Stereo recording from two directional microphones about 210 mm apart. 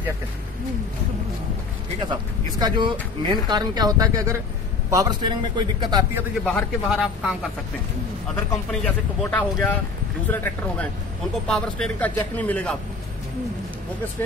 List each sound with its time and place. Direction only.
2.6 s speech: 20° right (ahead or behind)
6.4 s a man's voice: centre (ahead or behind)
8.5 s a man's voice: 10° left (ahead or behind)